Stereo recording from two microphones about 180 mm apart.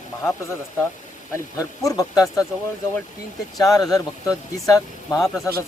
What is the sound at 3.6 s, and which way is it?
Speech, 20° left (ahead or behind).